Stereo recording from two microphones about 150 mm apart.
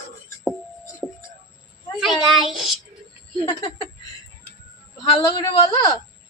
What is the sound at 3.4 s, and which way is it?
Speech, 35° left (ahead or behind).